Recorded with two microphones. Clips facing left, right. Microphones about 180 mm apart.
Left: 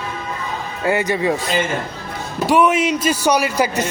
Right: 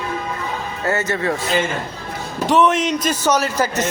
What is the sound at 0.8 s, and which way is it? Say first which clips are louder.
Speech: left 3 dB; 15° left (ahead or behind).